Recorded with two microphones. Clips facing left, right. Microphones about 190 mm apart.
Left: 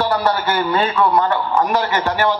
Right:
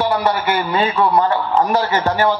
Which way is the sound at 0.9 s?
25° right (ahead or behind).